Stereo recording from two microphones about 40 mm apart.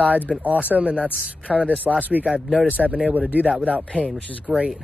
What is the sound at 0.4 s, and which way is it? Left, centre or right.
Speech, right.